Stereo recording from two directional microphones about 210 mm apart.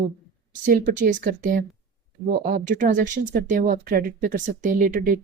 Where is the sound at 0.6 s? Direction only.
45° right (ahead or behind).